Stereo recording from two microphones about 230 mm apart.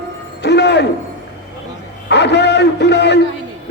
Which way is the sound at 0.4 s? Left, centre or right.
Left.